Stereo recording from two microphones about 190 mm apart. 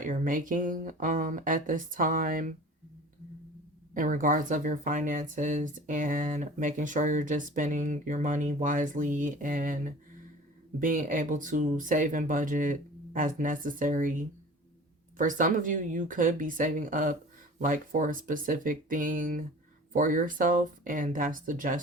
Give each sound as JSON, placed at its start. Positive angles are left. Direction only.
{"t": 0.0, "sound": "speech", "side_deg": -45}
{"t": 3.9, "sound": "speech", "side_deg": -45}